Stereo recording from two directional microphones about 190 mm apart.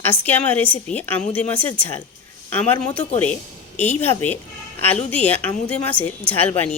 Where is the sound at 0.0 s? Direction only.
10° left (ahead or behind).